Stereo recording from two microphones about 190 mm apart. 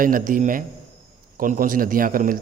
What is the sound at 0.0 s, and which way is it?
A man's voice, 45° right (ahead or behind).